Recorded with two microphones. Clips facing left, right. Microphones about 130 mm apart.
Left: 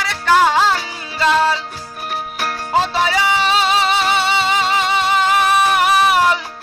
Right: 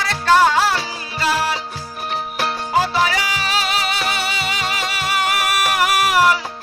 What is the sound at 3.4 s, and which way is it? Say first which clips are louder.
Music: left 6 dB; 25° left (ahead or behind).